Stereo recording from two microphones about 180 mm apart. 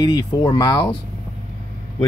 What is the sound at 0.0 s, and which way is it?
Speech, 25° left (ahead or behind).